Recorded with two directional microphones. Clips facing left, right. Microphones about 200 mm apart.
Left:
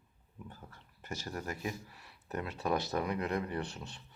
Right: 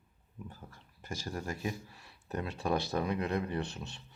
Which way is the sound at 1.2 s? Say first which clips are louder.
Right 2 dB; 30° right (ahead or behind).